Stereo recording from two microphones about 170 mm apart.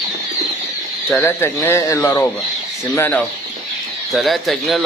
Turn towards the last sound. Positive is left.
turn(degrees=0)  # may be behind; listen again after turning